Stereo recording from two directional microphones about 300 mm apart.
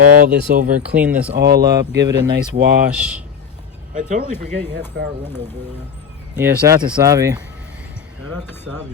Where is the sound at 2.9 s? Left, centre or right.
Centre.